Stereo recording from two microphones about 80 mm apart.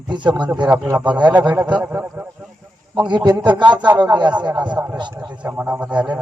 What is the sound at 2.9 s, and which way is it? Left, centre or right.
Speech, right.